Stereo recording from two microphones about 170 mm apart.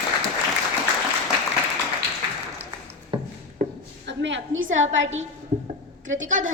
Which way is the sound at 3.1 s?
30° right (ahead or behind).